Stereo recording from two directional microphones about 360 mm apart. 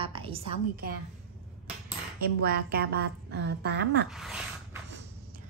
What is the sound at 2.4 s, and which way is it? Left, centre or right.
A woman's voice, right.